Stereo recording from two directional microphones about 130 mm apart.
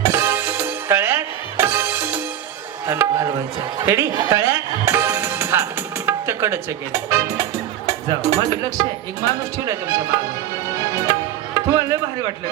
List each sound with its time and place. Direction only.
0.0 s music: 20° right (ahead or behind)
6.1 s speech: 20° right (ahead or behind)
10.8 s music: 25° right (ahead or behind)